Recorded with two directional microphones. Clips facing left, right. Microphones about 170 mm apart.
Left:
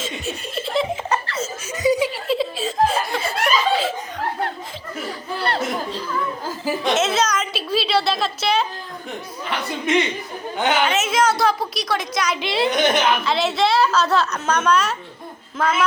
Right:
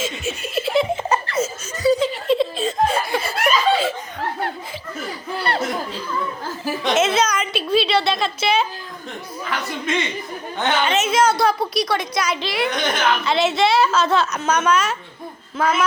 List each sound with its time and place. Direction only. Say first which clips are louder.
0.0 s laughter: right 2 dB; 5° right (ahead or behind)
1.1 s laughter: right 4 dB; 15° right (ahead or behind)
1.7 s laughter: right 1 dB; 15° left (ahead or behind)
2.2 s chuckle: right 3 dB; 5° left (ahead or behind)
5.4 s a sound: even; centre (ahead or behind)
6.8 s a woman's voice: right 2 dB; centre (ahead or behind)
9.5 s a man's voice: left 3 dB; 20° left (ahead or behind)
10.8 s a woman's voice: right 1 dB; centre (ahead or behind)
12.4 s a man's voice: left 2 dB; 25° left (ahead or behind)
13.2 s a woman's voice: right 1 dB; centre (ahead or behind)